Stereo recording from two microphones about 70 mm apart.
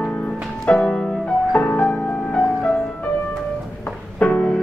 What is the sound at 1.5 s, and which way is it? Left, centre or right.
Music, left.